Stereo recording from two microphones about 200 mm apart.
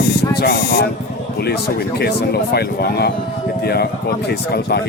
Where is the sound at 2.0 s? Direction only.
55° left (ahead or behind).